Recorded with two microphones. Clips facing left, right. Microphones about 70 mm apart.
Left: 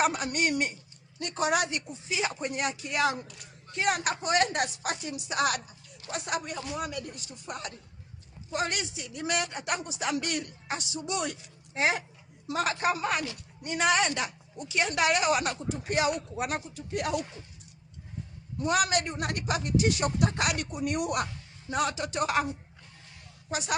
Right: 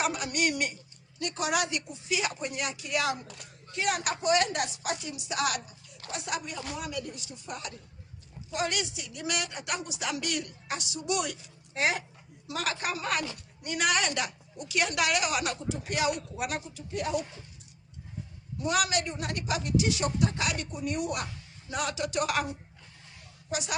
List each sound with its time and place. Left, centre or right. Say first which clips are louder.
0.0 s speech: left 2 dB; left
2.5 s a woman's voice: left 1 dB; left
16.7 s speech: left 1 dB; left
18.6 s a woman's voice: left 2 dB; left
21.7 s speech: left 2 dB; left
23.5 s a woman's voice: left 1 dB; left